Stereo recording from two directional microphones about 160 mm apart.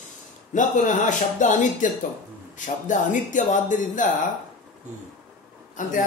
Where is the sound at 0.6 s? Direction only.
50° left (ahead or behind).